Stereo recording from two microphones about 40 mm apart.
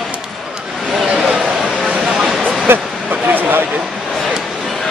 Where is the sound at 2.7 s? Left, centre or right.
Right.